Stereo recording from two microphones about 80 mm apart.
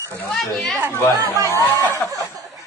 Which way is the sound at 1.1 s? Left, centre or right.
Right.